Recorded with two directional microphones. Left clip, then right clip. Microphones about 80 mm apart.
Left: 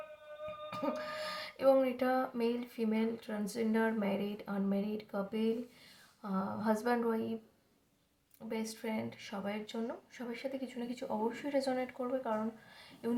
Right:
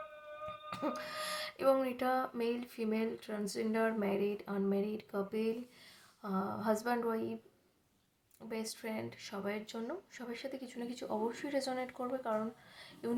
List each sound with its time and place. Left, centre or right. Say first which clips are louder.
0.7 s speech: left 1 dB; right
8.4 s speech: left 2 dB; right